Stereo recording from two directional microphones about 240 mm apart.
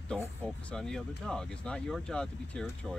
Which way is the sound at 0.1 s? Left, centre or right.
Centre.